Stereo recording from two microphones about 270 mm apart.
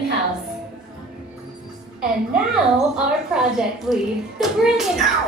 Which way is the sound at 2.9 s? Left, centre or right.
Centre.